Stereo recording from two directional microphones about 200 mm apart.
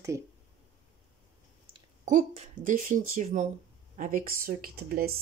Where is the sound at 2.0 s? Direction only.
35° right (ahead or behind).